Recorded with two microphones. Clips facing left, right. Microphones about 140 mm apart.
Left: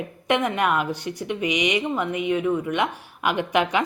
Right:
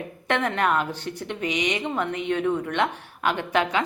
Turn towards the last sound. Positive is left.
turn(degrees=15)  # may be behind; listen again after turning